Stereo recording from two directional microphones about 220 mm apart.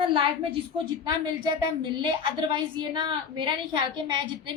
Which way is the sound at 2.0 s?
20° right (ahead or behind).